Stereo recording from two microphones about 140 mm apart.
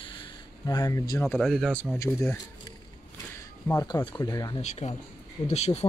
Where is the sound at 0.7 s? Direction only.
25° left (ahead or behind).